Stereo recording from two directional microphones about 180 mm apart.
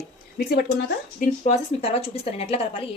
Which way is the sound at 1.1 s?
40° left (ahead or behind).